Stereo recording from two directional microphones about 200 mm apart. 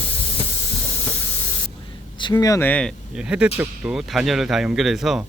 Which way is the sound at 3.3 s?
5° right (ahead or behind).